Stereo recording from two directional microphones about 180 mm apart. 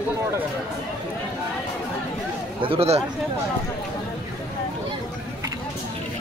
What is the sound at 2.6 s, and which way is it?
Speech, 30° right (ahead or behind).